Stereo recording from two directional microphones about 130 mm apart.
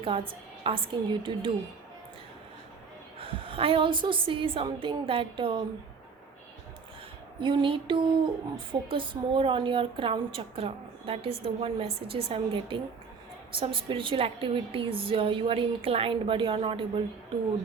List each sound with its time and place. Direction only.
0.0 s a woman's voice: 45° right (ahead or behind)
3.2 s a woman's voice: 45° right (ahead or behind)
7.3 s a woman's voice: 40° right (ahead or behind)